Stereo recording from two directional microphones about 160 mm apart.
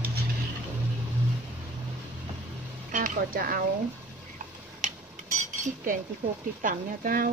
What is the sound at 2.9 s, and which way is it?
Speech, 55° right (ahead or behind).